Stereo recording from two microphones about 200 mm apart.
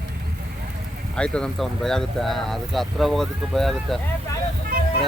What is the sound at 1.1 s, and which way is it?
Speech, 5° left (ahead or behind).